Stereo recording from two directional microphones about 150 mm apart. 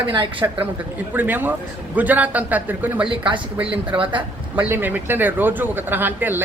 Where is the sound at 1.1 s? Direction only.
10° right (ahead or behind).